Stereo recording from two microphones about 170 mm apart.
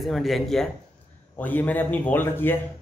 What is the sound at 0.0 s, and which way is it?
Speech, centre (ahead or behind).